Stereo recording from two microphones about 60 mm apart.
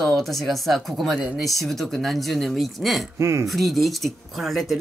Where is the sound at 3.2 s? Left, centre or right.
Right.